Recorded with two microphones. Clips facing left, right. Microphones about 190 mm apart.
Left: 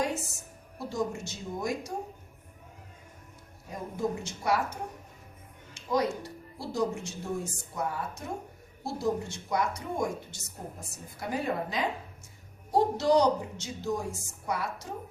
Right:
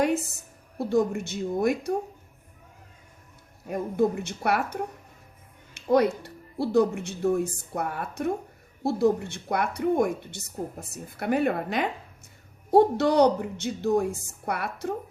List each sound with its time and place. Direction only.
0.9 s speech: 60° right (ahead or behind)
3.7 s speech: 60° right (ahead or behind)